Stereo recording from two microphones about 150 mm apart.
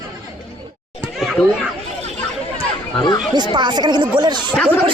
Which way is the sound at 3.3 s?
30° right (ahead or behind).